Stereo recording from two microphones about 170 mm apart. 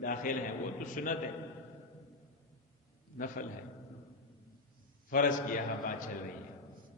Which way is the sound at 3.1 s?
55° left (ahead or behind).